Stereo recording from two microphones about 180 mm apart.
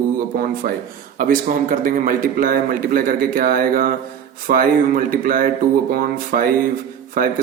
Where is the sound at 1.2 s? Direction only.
50° right (ahead or behind).